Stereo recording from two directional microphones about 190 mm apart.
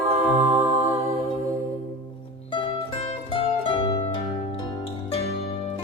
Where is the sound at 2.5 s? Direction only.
25° left (ahead or behind).